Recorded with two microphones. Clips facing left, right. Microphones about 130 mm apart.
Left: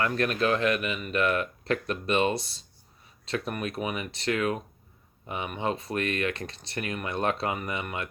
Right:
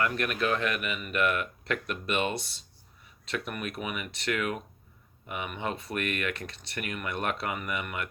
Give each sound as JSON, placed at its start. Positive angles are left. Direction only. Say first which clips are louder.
{"t": 0.0, "sound": "speech", "louder": "left 3 dB", "side_deg": 30}